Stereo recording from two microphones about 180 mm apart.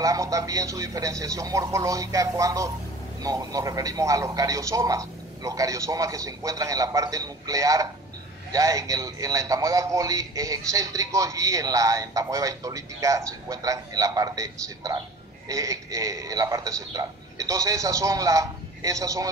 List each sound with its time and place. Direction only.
0.0 s a man's voice: 20° right (ahead or behind)